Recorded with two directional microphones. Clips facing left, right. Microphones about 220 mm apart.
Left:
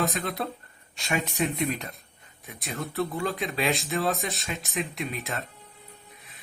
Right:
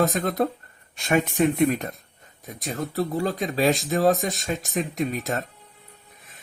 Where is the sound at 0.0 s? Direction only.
45° right (ahead or behind).